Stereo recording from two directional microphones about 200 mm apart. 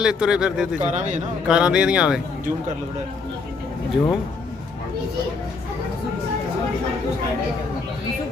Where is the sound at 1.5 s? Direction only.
5° right (ahead or behind).